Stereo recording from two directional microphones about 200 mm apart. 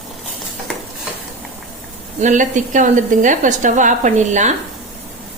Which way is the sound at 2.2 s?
40° right (ahead or behind).